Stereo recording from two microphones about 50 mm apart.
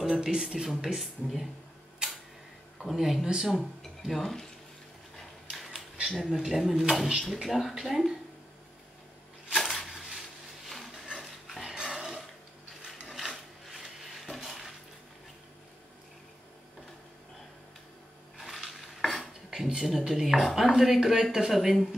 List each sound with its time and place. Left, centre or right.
0.0 s speech: centre
2.0 s camera: centre
2.8 s speech: centre
6.2 s speech: centre
9.6 s a sound: centre
11.1 s dog: centre
11.8 s dishes: centre
12.8 s mechanisms: centre
13.7 s a sound: centre
18.4 s dishes: centre
19.5 s a sound: centre
20.2 s speech: centre